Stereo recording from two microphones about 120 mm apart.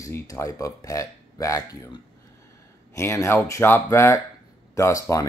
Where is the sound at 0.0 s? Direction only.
25° left (ahead or behind).